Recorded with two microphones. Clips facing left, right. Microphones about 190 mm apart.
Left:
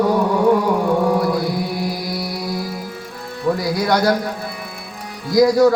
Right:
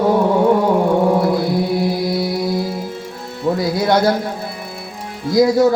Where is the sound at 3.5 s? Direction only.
25° right (ahead or behind).